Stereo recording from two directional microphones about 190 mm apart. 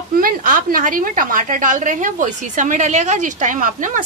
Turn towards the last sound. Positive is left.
turn(degrees=-45)  # may be behind; listen again after turning